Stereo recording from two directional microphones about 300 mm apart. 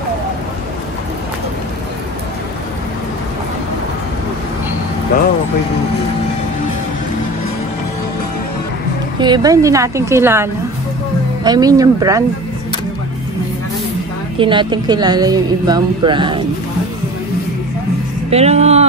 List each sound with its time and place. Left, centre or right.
9.2 s speech: centre
14.4 s speech: centre
18.3 s speech: right